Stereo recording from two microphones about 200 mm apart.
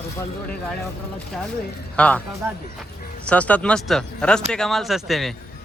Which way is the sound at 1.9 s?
5° left (ahead or behind).